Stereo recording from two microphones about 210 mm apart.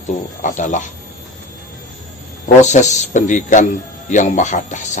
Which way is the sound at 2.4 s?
35° left (ahead or behind).